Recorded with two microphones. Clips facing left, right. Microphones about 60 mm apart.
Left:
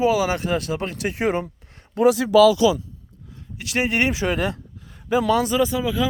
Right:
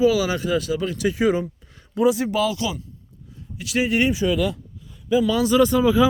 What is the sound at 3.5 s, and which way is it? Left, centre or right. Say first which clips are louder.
Speech: right 1 dB; left.